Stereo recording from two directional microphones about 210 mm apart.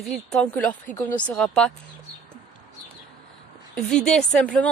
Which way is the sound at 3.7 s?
5° left (ahead or behind).